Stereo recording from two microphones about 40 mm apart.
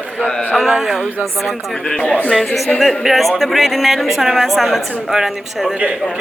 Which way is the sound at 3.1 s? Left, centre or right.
Centre.